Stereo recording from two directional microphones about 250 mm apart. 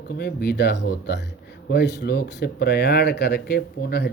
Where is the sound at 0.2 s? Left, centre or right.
Left.